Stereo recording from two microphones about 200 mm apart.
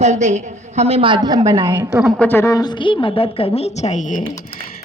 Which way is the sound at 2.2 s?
10° left (ahead or behind).